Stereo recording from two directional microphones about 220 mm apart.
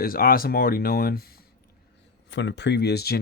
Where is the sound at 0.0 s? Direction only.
40° left (ahead or behind).